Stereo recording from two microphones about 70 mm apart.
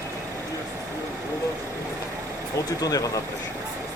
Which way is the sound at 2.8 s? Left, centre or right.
Left.